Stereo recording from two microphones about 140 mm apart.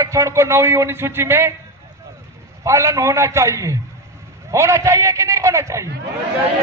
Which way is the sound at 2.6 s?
20° right (ahead or behind).